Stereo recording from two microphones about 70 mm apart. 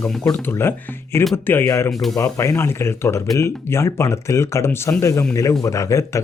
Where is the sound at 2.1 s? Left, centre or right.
Left.